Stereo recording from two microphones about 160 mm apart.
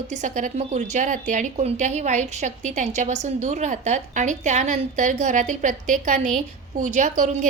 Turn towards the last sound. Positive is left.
turn(degrees=-45)  # may be behind; listen again after turning